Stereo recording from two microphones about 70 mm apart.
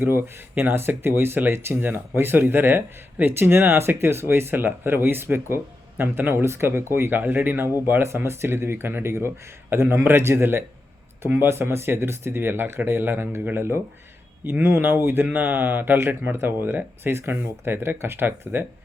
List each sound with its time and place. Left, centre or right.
0.0 s speech: right
14.4 s speech: right